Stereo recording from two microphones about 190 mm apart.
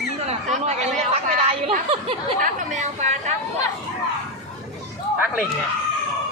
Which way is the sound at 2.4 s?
40° right (ahead or behind).